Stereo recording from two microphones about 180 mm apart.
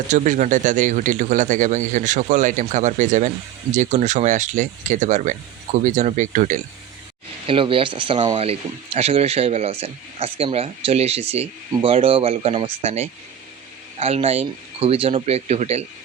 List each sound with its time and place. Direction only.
0.1 s speech: 40° right (ahead or behind)
7.4 s speech: 30° right (ahead or behind)